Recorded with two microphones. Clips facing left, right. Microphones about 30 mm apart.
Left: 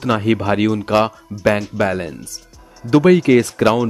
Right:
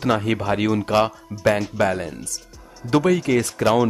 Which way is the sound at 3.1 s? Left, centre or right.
Left.